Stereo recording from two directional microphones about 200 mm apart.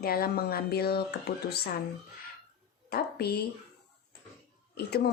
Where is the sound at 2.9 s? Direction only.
50° left (ahead or behind).